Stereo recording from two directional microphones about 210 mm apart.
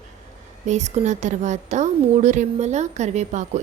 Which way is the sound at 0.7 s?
35° right (ahead or behind).